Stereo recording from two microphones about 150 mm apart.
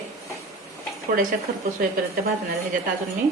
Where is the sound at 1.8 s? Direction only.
75° right (ahead or behind).